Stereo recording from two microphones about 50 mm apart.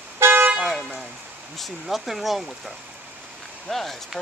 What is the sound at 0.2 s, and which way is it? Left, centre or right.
Vehicle, right.